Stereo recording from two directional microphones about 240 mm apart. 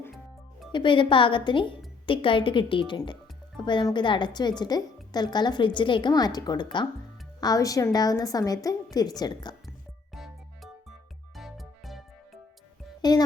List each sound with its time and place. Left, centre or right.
0.7 s a woman's voice: centre
9.6 s music: centre
13.0 s music: centre